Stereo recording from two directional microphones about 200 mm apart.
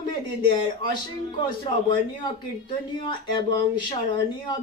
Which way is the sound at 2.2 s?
25° left (ahead or behind).